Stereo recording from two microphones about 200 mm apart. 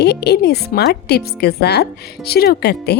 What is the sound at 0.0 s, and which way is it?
Speech, 55° left (ahead or behind).